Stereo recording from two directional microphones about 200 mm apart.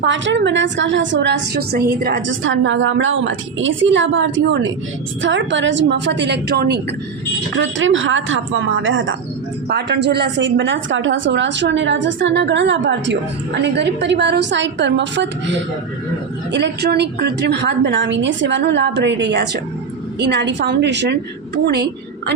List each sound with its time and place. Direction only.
0.0 s a woman's voice: 65° right (ahead or behind)
7.5 s a woman's voice: 70° right (ahead or behind)
9.6 s a woman's voice: 55° right (ahead or behind)
16.5 s a woman's voice: 60° right (ahead or behind)